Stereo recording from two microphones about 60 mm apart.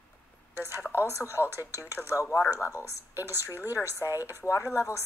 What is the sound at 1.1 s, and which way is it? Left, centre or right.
A woman's voice, left.